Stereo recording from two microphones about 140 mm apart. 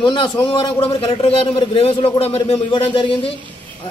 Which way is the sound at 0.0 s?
35° left (ahead or behind).